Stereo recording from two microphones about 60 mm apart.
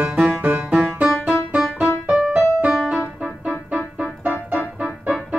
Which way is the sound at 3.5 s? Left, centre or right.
Right.